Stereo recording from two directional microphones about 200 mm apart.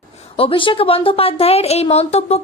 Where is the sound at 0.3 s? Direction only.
25° left (ahead or behind).